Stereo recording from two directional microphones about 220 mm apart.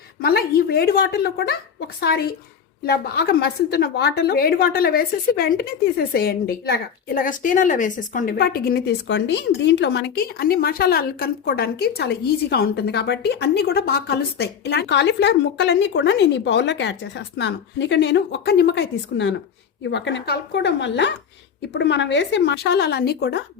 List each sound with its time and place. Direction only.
0.2 s a woman's voice: 45° left (ahead or behind)